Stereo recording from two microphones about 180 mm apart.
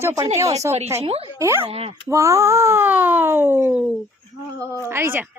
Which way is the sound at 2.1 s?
15° right (ahead or behind).